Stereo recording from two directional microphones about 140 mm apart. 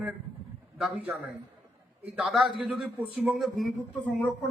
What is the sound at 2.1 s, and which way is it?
A man's voice, centre (ahead or behind).